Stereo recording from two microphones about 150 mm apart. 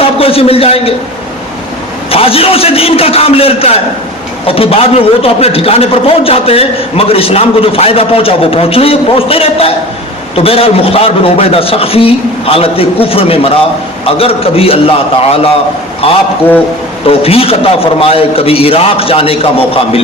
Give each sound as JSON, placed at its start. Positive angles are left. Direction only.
{"t": 0.0, "sound": "a man's voice", "side_deg": 40}
{"t": 2.0, "sound": "a man's voice", "side_deg": 40}
{"t": 17.1, "sound": "a man's voice", "side_deg": 40}